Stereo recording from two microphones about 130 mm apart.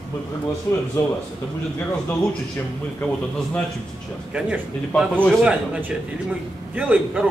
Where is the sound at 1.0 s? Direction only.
25° left (ahead or behind).